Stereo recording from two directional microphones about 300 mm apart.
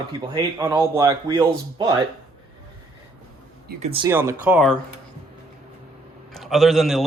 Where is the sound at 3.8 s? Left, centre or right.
Centre.